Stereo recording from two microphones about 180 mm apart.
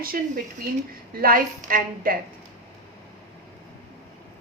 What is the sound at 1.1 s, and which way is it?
A woman's voice, 50° right (ahead or behind).